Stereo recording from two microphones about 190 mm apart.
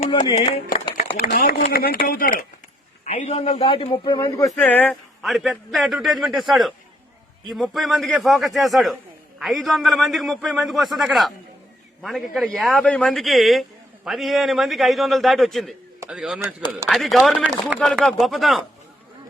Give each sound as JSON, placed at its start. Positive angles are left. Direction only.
{"t": 0.1, "sound": "speech", "side_deg": 30}
{"t": 1.2, "sound": "speech", "side_deg": 50}
{"t": 3.0, "sound": "a man's voice", "side_deg": 35}
{"t": 4.6, "sound": "a man's voice", "side_deg": 5}